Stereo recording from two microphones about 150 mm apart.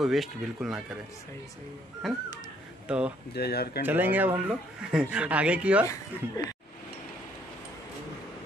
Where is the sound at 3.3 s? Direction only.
90° left.